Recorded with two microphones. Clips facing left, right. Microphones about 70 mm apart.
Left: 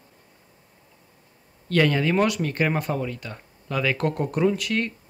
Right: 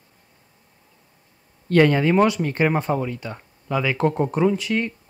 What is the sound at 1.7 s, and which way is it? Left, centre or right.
Speech, right.